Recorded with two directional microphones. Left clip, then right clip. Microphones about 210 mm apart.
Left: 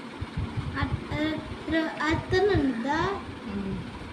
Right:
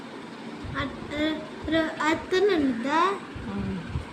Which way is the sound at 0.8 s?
10° right (ahead or behind).